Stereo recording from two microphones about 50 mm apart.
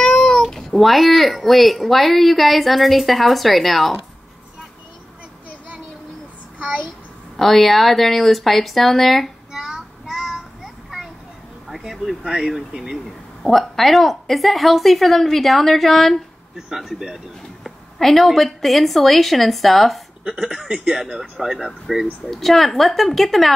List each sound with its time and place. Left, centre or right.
0.0 s speech: centre
7.3 s speech: centre
9.5 s child singing: centre
11.6 s a sound: centre
12.2 s speech: centre
13.4 s speech: centre
16.5 s speech: centre
17.6 s speech: centre
20.2 s speech: centre
22.2 s speech: centre